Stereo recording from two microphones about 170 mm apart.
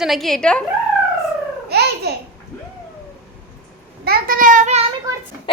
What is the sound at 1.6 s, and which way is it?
Babbling, 70° right (ahead or behind).